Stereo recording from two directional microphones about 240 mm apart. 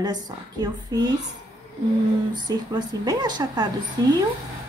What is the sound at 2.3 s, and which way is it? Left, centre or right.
Speech, centre.